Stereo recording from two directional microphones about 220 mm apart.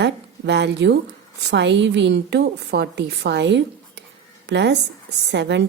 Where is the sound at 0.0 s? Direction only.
50° right (ahead or behind).